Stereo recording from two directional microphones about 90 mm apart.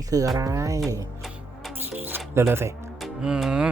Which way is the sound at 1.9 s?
25° right (ahead or behind).